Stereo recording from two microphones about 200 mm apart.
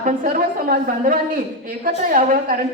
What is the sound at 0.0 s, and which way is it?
A woman's voice, 45° right (ahead or behind).